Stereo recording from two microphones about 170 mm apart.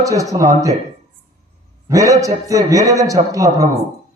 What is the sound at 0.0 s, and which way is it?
Speech, 20° right (ahead or behind).